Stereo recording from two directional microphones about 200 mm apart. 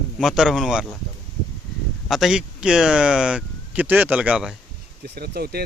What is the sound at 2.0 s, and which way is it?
Speech, centre (ahead or behind).